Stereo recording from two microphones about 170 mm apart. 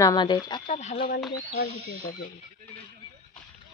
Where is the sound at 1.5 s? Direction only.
65° left (ahead or behind).